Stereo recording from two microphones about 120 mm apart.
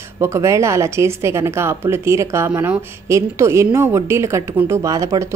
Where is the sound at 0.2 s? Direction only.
25° right (ahead or behind).